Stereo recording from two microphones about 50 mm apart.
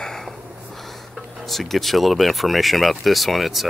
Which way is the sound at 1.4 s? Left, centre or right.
Centre.